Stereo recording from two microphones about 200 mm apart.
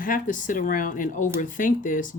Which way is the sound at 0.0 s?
40° left (ahead or behind).